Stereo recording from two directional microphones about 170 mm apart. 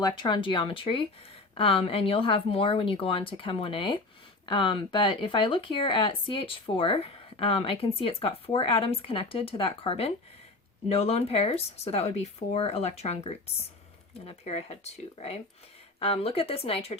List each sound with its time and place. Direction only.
0.0 s speech: 30° left (ahead or behind)